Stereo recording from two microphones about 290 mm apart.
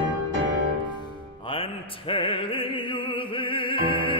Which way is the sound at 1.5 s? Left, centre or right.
Centre.